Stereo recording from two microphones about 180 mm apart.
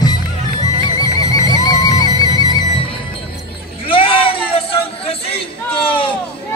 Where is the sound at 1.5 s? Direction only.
20° left (ahead or behind).